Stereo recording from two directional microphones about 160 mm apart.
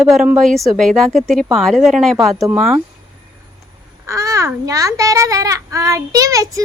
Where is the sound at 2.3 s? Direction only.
20° right (ahead or behind).